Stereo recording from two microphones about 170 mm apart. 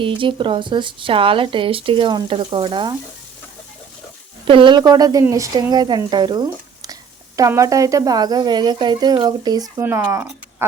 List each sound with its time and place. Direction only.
0.0 s speech: 30° right (ahead or behind)
4.4 s speech: 30° right (ahead or behind)